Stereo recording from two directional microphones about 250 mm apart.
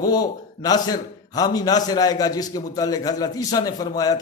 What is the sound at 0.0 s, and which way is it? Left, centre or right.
A man's voice, centre.